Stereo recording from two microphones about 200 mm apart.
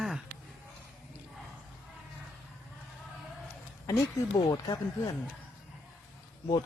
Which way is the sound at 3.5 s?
15° left (ahead or behind).